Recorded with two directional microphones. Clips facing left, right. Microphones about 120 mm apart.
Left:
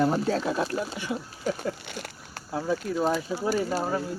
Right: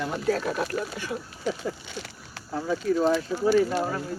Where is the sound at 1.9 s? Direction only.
55° left (ahead or behind).